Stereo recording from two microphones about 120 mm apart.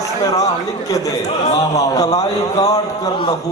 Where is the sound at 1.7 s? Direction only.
30° left (ahead or behind).